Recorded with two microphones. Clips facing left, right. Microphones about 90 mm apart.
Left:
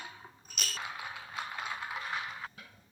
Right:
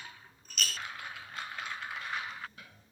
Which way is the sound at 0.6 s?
5° left (ahead or behind).